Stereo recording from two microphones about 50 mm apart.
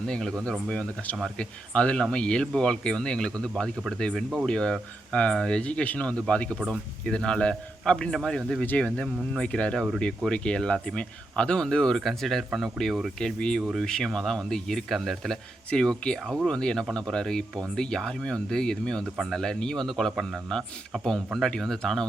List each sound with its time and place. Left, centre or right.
0.0 s speech: centre
1.4 s speech: left
8.7 s speech: left; by 13.0 s centre
13.1 s speech: centre
15.7 s speech: centre
19.0 s speech: centre
19.3 s speech: centre